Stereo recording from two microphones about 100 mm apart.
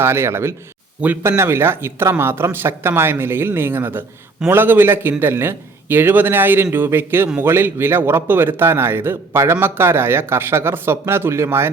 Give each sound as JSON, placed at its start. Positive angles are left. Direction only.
{"t": 0.0, "sound": "a man's voice", "side_deg": -25}